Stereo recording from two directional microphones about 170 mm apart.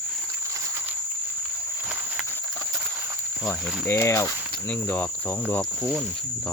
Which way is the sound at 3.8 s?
15° left (ahead or behind).